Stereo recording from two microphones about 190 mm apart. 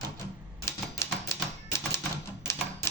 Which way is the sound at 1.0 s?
15° left (ahead or behind).